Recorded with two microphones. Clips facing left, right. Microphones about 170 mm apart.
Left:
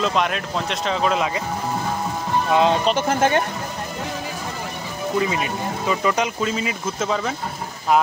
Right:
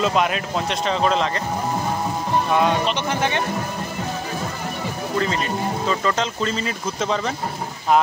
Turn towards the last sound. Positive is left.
turn(degrees=5)  # may be behind; listen again after turning